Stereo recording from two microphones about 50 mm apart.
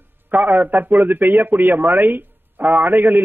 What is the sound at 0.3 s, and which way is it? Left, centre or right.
A man's voice, right.